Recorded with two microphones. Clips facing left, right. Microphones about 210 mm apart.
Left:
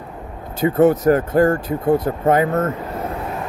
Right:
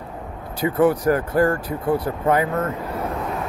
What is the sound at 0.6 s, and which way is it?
Speech, 25° left (ahead or behind).